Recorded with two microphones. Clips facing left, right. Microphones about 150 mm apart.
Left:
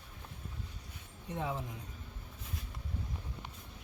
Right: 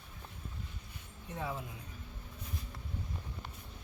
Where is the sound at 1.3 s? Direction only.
20° left (ahead or behind).